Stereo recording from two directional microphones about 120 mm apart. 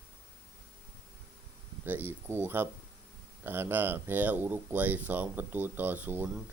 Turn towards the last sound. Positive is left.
turn(degrees=-15)  # may be behind; listen again after turning